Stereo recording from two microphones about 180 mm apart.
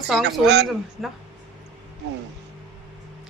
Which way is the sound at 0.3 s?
70° right (ahead or behind).